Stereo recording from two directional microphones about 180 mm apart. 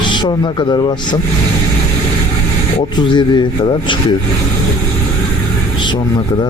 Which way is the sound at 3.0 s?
25° left (ahead or behind).